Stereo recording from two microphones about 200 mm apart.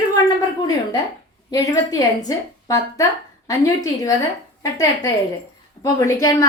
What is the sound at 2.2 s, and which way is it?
Speech, 15° left (ahead or behind).